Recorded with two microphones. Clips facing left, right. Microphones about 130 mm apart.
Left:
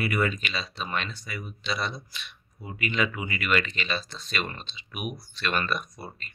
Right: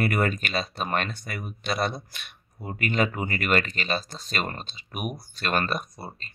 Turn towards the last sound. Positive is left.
turn(degrees=-35)  # may be behind; listen again after turning